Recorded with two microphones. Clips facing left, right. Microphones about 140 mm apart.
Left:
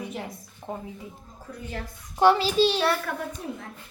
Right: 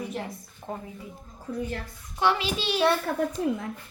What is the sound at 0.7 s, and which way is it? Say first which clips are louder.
Speech: left 1 dB; 15° left (ahead or behind).